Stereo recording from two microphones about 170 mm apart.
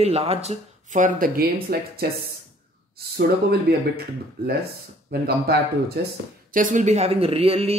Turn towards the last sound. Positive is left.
turn(degrees=-35)  # may be behind; listen again after turning